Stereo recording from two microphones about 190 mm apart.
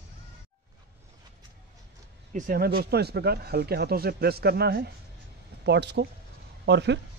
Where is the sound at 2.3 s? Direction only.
45° right (ahead or behind).